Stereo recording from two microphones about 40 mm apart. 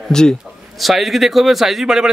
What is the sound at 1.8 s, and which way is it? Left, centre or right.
Speech, centre.